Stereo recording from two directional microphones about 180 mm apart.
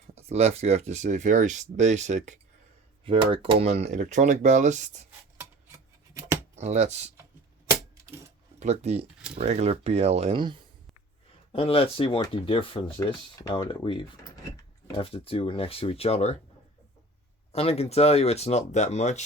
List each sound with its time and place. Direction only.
0.1 s speech: 35° right (ahead or behind)
3.0 s speech: 30° right (ahead or behind)
5.4 s a sound: 15° right (ahead or behind)
6.6 s speech: 40° right (ahead or behind)
8.5 s speech: 40° right (ahead or behind)
11.5 s speech: 30° left (ahead or behind)
17.5 s speech: 35° left (ahead or behind)